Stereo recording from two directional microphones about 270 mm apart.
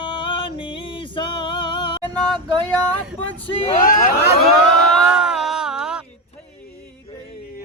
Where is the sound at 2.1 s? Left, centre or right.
Centre.